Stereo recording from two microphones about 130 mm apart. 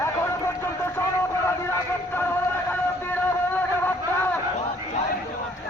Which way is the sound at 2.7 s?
15° left (ahead or behind).